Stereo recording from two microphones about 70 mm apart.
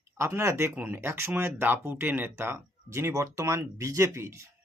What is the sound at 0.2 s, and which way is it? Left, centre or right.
Speech, right.